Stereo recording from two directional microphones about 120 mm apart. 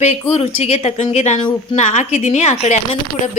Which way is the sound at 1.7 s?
85° left.